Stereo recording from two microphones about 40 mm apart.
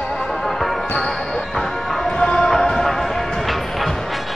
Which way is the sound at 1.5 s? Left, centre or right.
Centre.